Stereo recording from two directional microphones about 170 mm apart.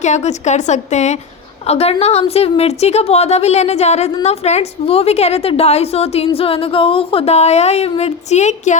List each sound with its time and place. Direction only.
0.0 s a woman's voice: 40° left (ahead or behind)